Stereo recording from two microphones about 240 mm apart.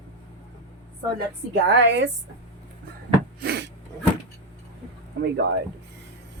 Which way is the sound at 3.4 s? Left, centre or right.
Right.